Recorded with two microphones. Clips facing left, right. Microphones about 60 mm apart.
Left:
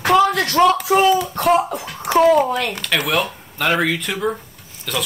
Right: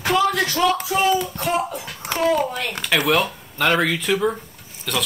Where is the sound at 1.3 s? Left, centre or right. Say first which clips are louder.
Left 6 dB; left.